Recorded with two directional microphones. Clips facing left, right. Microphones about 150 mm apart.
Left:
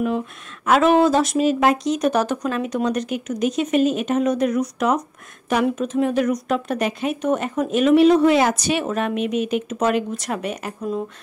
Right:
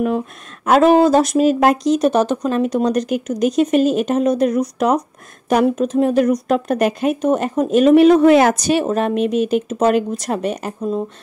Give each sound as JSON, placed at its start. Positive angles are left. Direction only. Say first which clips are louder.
{"t": 0.7, "sound": "speech", "louder": "right 4 dB", "side_deg": -40}
{"t": 2.0, "sound": "speech", "louder": "right 4 dB", "side_deg": -25}
{"t": 2.6, "sound": "speech", "louder": "right 5 dB", "side_deg": -40}
{"t": 8.0, "sound": "speech", "louder": "right 3 dB", "side_deg": -55}